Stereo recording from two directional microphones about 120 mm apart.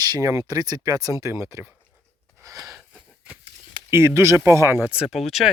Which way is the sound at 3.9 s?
20° right (ahead or behind).